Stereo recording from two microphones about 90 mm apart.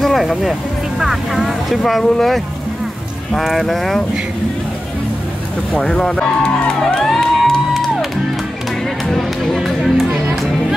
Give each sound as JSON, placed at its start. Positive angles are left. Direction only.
{"t": 0.0, "sound": "speech", "side_deg": 0}
{"t": 5.7, "sound": "speech", "side_deg": 5}
{"t": 9.0, "sound": "music", "side_deg": 5}